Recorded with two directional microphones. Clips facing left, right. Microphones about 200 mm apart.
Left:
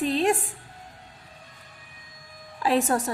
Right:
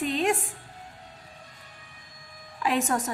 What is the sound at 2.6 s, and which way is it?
Speech, 35° left (ahead or behind).